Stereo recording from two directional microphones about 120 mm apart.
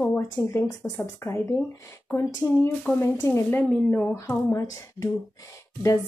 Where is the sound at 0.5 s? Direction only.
25° left (ahead or behind).